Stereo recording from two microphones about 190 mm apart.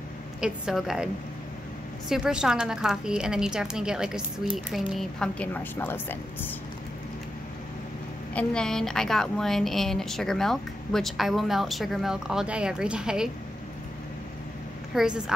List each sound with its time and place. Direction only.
0.4 s a woman's voice: centre (ahead or behind)
8.4 s a woman's voice: 5° left (ahead or behind)
15.0 s a woman's voice: 5° right (ahead or behind)